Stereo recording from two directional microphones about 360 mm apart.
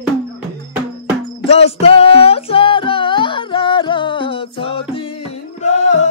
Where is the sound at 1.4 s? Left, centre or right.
Centre.